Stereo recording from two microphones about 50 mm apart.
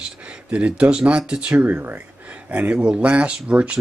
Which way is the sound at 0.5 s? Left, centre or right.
Right.